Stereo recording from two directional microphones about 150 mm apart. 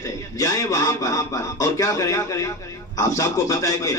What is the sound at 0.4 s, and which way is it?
Speech, 20° left (ahead or behind).